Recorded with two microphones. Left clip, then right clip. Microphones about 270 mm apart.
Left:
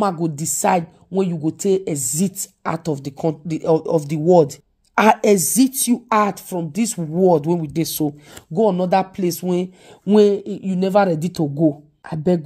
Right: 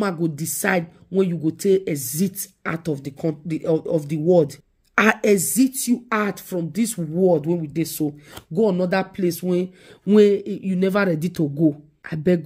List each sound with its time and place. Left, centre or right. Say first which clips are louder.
0.0 s a woman's voice: left 4 dB; centre
10.0 s speech: left 1 dB; centre